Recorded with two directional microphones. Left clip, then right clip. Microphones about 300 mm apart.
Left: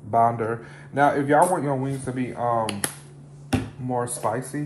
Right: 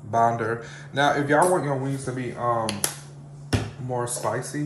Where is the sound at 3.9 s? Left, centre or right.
Centre.